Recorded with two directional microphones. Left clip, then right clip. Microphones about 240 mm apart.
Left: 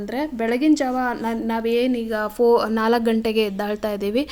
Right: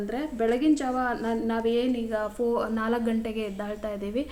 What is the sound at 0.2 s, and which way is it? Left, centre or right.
A woman's voice, left.